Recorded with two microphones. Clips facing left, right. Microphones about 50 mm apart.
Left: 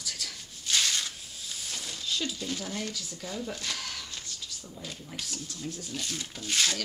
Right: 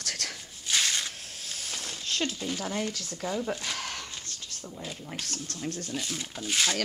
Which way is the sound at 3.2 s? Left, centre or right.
Right.